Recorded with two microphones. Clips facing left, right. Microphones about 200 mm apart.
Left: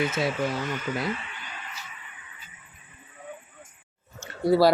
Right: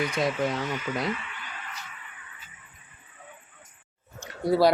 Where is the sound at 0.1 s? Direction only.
5° left (ahead or behind).